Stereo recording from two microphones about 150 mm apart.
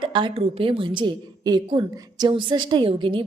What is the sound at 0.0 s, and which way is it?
A woman's voice, 30° right (ahead or behind).